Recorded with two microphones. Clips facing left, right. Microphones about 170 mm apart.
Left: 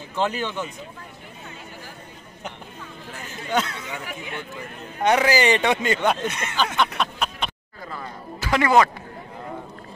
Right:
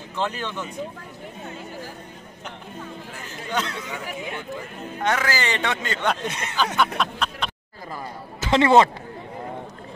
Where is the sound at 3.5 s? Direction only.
10° left (ahead or behind).